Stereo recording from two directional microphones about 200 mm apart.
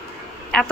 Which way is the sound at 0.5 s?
5° left (ahead or behind).